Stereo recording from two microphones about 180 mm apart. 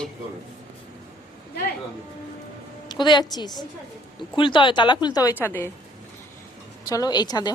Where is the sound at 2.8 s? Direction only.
25° left (ahead or behind).